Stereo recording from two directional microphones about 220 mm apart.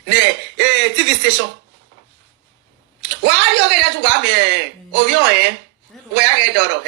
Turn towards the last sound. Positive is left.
turn(degrees=-50)  # may be behind; listen again after turning